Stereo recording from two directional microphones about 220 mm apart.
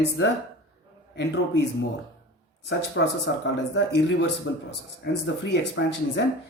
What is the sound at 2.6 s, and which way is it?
Speech, 55° left (ahead or behind).